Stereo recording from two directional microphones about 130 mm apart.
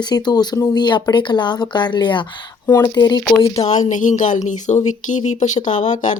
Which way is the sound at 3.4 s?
45° left (ahead or behind).